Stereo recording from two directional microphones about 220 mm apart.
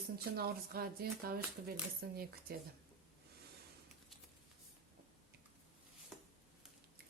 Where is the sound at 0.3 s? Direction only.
45° right (ahead or behind).